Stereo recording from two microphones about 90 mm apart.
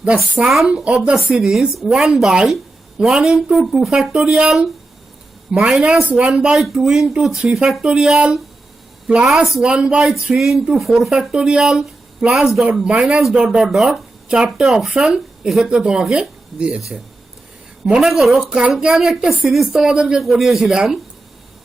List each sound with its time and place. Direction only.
0.0 s a woman's voice: 10° right (ahead or behind)